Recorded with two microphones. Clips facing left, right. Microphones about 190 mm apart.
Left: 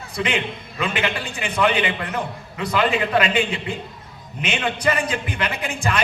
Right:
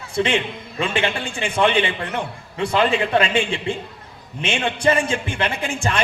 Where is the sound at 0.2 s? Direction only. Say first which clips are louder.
Right 4 dB; 30° right (ahead or behind).